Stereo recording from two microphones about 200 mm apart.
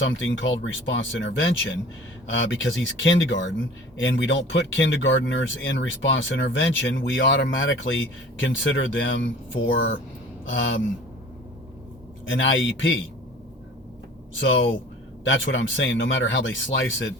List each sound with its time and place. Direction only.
0.0 s speech: 75° left (ahead or behind)
12.3 s speech: 70° left (ahead or behind)
14.3 s speech: 70° left (ahead or behind)